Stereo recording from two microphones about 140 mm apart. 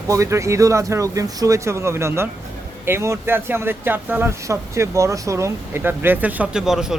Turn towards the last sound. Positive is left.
turn(degrees=-5)  # may be behind; listen again after turning